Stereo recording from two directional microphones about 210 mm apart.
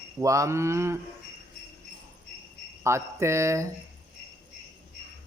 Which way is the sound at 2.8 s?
15° right (ahead or behind).